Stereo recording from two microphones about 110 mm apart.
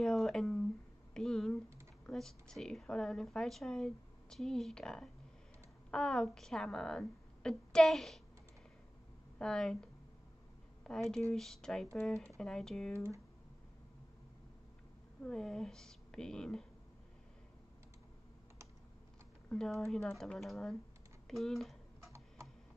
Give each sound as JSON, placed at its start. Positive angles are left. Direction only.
{"t": 0.0, "sound": "a sound", "side_deg": 0}
{"t": 2.0, "sound": "a woman's voice", "side_deg": 5}
{"t": 9.4, "sound": "a woman's voice", "side_deg": 5}
{"t": 12.9, "sound": "speech", "side_deg": -25}
{"t": 15.2, "sound": "a woman's voice", "side_deg": 5}
{"t": 19.5, "sound": "a woman's voice", "side_deg": 5}
{"t": 22.0, "sound": "typing", "side_deg": -25}